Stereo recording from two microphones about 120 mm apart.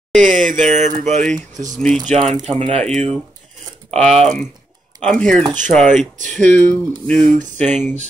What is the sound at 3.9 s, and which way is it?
Speech, 65° right (ahead or behind).